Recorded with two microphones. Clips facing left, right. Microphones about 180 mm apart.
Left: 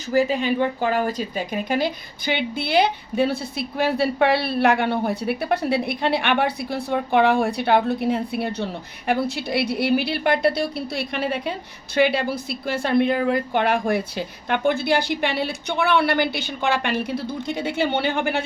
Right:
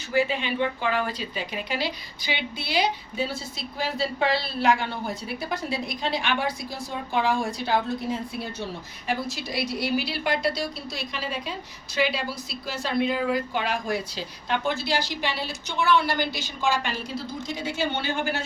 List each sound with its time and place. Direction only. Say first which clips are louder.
0.1 s speech: left 5 dB; 40° left (ahead or behind); by 18.4 s 60° left (ahead or behind)